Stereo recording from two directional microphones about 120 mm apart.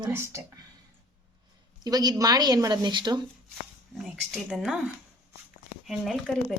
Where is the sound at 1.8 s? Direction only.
35° right (ahead or behind).